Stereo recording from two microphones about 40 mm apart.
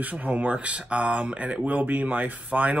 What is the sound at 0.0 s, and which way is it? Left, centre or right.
Speech, right.